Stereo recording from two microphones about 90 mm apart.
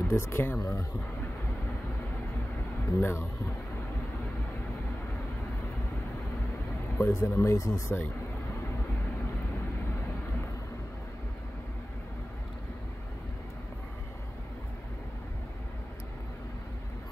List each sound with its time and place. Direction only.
0.1 s speech: 30° left (ahead or behind)
3.0 s speech: 25° left (ahead or behind)
7.0 s speech: 30° left (ahead or behind)